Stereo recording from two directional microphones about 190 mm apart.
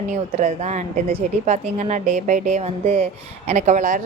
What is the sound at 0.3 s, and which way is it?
A woman's voice, 40° right (ahead or behind).